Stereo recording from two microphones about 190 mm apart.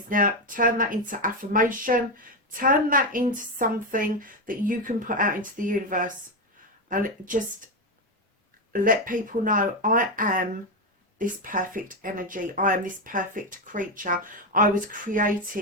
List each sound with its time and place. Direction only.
0.1 s speech: 45° right (ahead or behind)
8.7 s speech: 45° right (ahead or behind)